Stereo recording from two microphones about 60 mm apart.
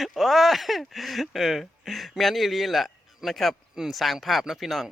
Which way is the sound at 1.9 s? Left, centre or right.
Centre.